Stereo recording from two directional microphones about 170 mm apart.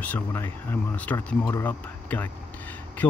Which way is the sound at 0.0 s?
10° left (ahead or behind).